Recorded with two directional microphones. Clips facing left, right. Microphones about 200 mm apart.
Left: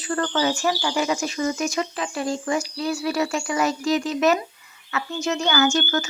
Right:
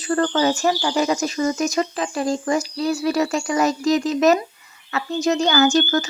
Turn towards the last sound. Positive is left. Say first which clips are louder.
# right 4 dB
turn(degrees=-35)  # may be behind; listen again after turning